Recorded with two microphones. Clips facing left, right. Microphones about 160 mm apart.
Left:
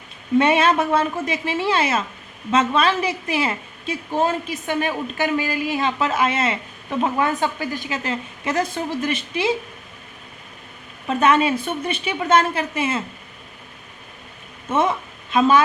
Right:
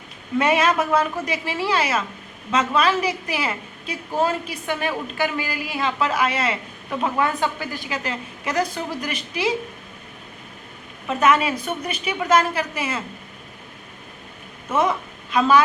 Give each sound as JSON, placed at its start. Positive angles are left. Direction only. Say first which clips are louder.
{"t": 0.3, "sound": "a woman's voice", "louder": "left 2 dB", "side_deg": 30}
{"t": 7.7, "sound": "a woman's voice", "louder": "left 2 dB", "side_deg": 20}
{"t": 11.2, "sound": "a woman's voice", "louder": "left 1 dB", "side_deg": 30}
{"t": 14.7, "sound": "a woman's voice", "louder": "left 1 dB", "side_deg": 25}